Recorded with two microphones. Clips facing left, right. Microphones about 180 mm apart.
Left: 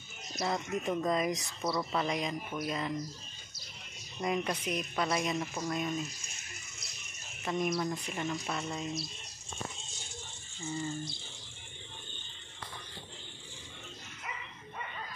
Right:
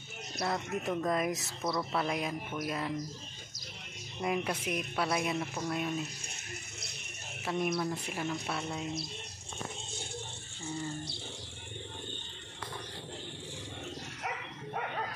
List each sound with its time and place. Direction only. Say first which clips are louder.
0.4 s speech: left 1 dB; centre (ahead or behind)
4.2 s speech: even; 5° right (ahead or behind)
7.4 s speech: even; 5° right (ahead or behind)
10.6 s speech: left 1 dB; 65° right (ahead or behind)
14.2 s bow-wow: right 5 dB; 70° right (ahead or behind)